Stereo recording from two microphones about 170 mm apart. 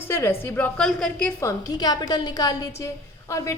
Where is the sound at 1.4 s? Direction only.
20° left (ahead or behind).